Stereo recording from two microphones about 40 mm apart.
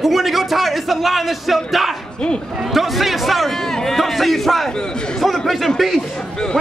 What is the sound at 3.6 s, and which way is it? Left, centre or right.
A man's voice, centre.